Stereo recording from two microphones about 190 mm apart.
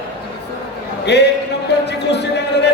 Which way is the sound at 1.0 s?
60° left (ahead or behind).